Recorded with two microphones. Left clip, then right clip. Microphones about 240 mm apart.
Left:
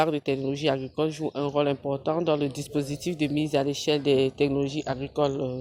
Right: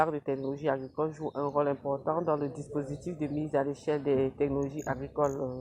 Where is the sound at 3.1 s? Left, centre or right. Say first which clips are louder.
Left 7 dB; centre.